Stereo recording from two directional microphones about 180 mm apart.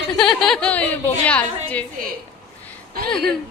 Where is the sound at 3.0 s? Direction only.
5° left (ahead or behind).